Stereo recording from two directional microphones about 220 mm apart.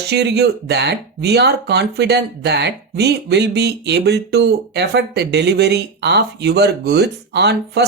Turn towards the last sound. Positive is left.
turn(degrees=-50)  # may be behind; listen again after turning